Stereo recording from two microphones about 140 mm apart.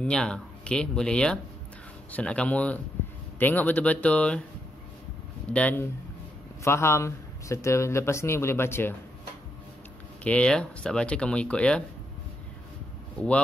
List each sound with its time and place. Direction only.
0.0 s speech: 5° left (ahead or behind)
5.5 s speech: 10° left (ahead or behind)
10.2 s speech: 10° left (ahead or behind)